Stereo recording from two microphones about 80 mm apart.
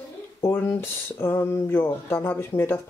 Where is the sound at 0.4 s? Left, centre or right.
Left.